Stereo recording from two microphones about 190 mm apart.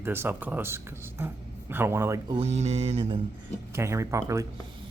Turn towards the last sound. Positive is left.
turn(degrees=-15)  # may be behind; listen again after turning